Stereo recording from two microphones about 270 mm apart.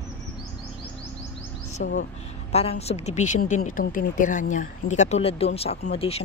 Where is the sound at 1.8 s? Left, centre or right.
Left.